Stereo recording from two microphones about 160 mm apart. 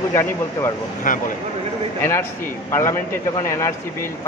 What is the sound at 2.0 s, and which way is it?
Speech, 15° left (ahead or behind).